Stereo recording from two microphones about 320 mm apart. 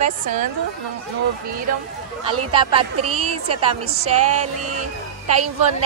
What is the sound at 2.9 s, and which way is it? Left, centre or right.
Speech, right.